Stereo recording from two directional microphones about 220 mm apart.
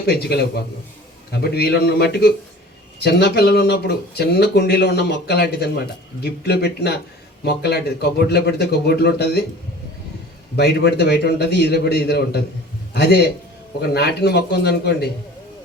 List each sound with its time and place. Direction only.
0.0 s speech: 45° left (ahead or behind)
10.6 s a man's voice: 50° left (ahead or behind)